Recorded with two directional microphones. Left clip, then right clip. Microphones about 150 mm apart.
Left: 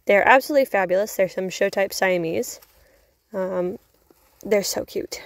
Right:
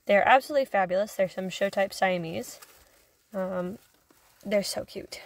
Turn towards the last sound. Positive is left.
turn(degrees=50)  # may be behind; listen again after turning